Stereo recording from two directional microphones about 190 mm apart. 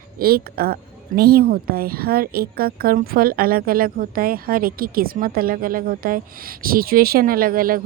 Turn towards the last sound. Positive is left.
turn(degrees=-50)  # may be behind; listen again after turning